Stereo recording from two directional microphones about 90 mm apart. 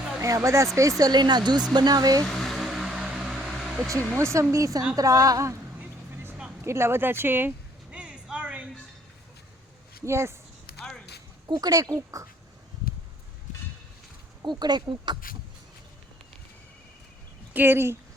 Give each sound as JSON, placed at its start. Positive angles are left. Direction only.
{"t": 0.2, "sound": "speech", "side_deg": -35}
{"t": 2.2, "sound": "a sound", "side_deg": 5}
{"t": 4.2, "sound": "speech", "side_deg": -30}
{"t": 6.6, "sound": "speech", "side_deg": -30}
{"t": 7.9, "sound": "vehicle", "side_deg": -10}
{"t": 10.1, "sound": "speech", "side_deg": -30}
{"t": 11.4, "sound": "speech", "side_deg": -45}
{"t": 14.4, "sound": "speech", "side_deg": -55}
{"t": 17.5, "sound": "speech", "side_deg": -25}